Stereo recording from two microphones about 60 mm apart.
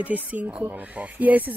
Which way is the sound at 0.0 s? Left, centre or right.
Right.